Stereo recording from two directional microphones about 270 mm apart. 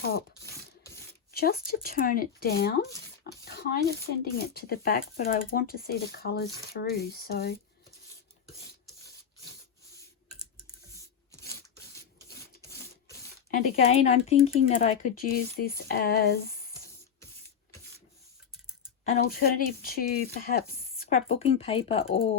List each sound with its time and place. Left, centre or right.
0.9 s speech: left
10.9 s a sound: centre
13.5 s speech: left
19.1 s speech: left